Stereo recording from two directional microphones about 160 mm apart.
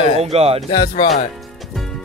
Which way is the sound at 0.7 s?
35° left (ahead or behind).